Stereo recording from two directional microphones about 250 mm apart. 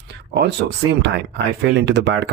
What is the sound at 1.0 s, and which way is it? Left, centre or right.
Speech, right.